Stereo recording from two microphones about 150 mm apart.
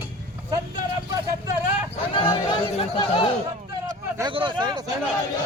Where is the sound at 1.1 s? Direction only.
20° right (ahead or behind).